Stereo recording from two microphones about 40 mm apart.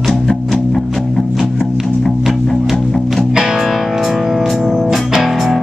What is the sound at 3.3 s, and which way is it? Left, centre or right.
Music, centre.